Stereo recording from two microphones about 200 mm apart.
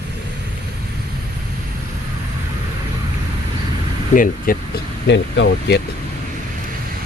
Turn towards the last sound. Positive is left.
turn(degrees=60)  # may be behind; listen again after turning